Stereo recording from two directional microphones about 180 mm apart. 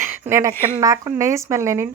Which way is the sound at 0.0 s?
15° right (ahead or behind).